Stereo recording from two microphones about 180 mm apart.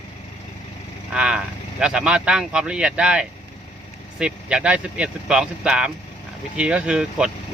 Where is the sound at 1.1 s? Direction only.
5° right (ahead or behind).